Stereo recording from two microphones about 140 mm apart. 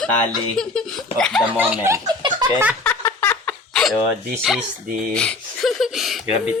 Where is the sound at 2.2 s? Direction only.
35° right (ahead or behind).